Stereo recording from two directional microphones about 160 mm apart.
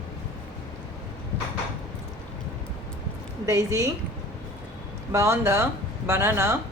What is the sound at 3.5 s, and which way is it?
Speech, 20° right (ahead or behind).